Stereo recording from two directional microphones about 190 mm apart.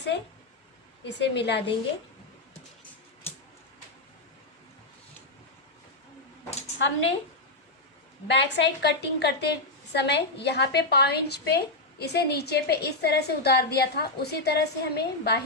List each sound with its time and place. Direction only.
1.0 s a woman's voice: 65° left (ahead or behind)
6.7 s a woman's voice: 75° left (ahead or behind)
8.3 s a woman's voice: 65° left (ahead or behind)